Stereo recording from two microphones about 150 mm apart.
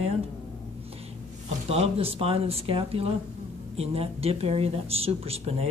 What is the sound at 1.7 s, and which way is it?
Speech, 40° right (ahead or behind).